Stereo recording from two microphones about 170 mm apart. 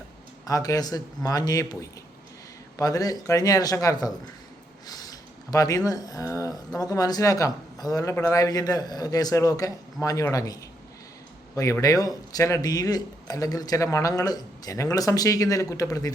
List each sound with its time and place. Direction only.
0.4 s speech: 20° left (ahead or behind)